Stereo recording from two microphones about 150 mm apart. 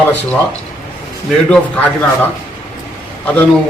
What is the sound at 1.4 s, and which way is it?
Speech, 10° left (ahead or behind).